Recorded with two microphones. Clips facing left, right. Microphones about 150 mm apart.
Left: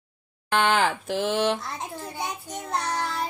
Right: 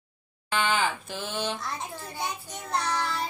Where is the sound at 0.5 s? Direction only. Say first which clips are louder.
Left 5 dB; 70° left (ahead or behind); by 1.6 s 85° left.